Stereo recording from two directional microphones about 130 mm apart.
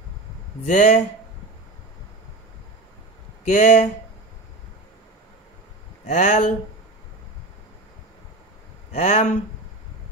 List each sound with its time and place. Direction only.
0.7 s speech: 70° left (ahead or behind)
3.4 s speech: 65° left (ahead or behind)
6.0 s speech: 70° left (ahead or behind)
8.9 s speech: 60° left (ahead or behind)